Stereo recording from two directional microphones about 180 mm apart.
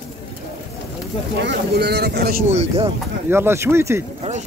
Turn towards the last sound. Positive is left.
turn(degrees=-15)  # may be behind; listen again after turning